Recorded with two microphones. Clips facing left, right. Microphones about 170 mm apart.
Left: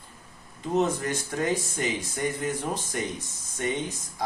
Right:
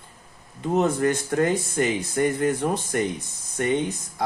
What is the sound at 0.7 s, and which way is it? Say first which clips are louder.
Speech: right 4 dB; 60° right (ahead or behind).